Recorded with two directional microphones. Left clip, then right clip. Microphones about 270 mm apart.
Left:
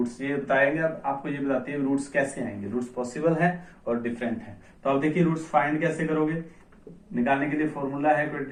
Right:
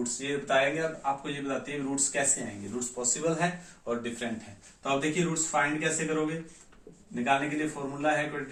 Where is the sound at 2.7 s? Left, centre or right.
Right.